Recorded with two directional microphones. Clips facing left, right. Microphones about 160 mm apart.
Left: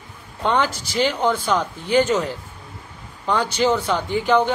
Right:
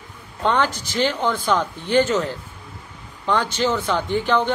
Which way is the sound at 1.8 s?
10° left (ahead or behind).